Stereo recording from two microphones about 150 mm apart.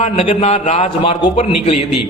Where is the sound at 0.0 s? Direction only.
40° left (ahead or behind).